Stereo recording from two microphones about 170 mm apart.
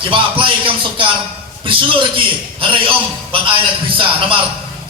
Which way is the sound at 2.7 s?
30° right (ahead or behind).